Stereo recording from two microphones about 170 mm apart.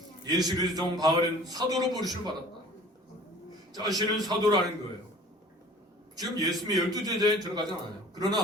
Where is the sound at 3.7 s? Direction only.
20° right (ahead or behind).